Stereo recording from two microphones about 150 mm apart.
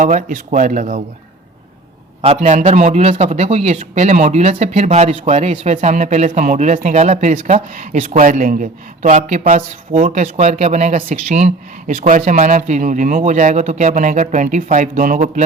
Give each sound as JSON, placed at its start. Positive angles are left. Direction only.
{"t": 0.0, "sound": "speech", "side_deg": -60}
{"t": 2.2, "sound": "a man's voice", "side_deg": -50}